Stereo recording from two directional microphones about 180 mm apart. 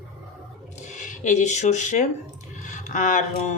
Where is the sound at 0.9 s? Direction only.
45° left (ahead or behind).